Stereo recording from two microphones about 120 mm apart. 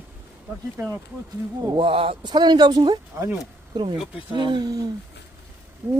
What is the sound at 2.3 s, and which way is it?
Speech, 35° right (ahead or behind).